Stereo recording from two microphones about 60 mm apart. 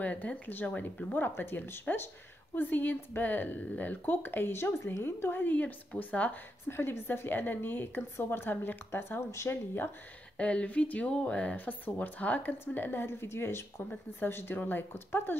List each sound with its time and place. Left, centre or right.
0.0 s a woman's voice: left
6.7 s a woman's voice: left
9.2 s speech: left
10.3 s a woman's voice: centre; by 15.3 s left